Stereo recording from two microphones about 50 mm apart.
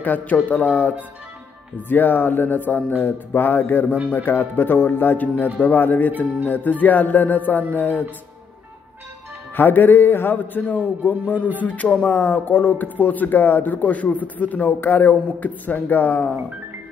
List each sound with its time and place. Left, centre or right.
0.0 s speech: left
9.6 s speech: left
12.1 s speech: left